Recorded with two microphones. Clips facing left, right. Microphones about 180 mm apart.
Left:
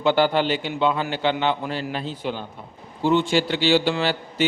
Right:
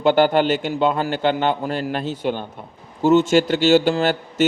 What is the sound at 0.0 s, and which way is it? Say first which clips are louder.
A man's voice: right 4 dB; 50° right (ahead or behind).